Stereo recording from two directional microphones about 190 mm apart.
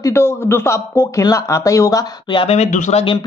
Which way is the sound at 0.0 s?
15° left (ahead or behind).